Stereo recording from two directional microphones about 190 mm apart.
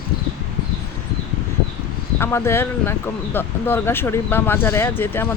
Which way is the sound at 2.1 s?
10° left (ahead or behind).